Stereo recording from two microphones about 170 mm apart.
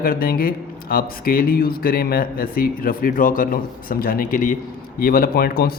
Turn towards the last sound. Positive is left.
turn(degrees=60)  # may be behind; listen again after turning